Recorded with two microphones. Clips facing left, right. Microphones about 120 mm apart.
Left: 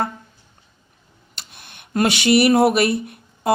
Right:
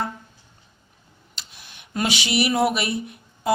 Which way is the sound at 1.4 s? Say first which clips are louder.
Left 2 dB; 55° left (ahead or behind).